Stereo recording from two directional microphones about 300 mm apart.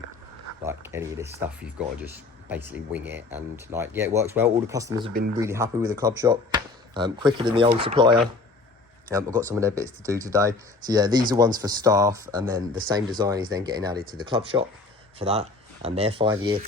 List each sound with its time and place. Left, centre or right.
0.6 s speech: centre
5.1 s speech: right
5.4 s speech: centre
15.2 s speech: right